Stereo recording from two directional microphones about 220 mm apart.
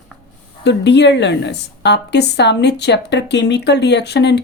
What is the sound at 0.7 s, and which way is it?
Speech, 50° left (ahead or behind).